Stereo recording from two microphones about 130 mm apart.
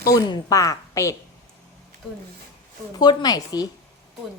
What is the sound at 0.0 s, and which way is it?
A woman's voice, 30° left (ahead or behind).